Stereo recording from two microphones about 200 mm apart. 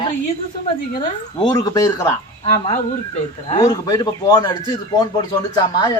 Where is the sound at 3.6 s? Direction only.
15° left (ahead or behind).